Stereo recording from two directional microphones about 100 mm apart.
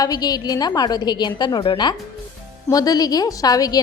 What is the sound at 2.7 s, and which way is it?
A woman's voice, 40° left (ahead or behind).